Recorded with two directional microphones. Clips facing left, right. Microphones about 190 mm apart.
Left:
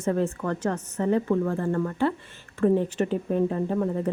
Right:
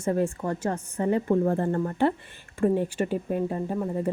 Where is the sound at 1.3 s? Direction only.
30° right (ahead or behind).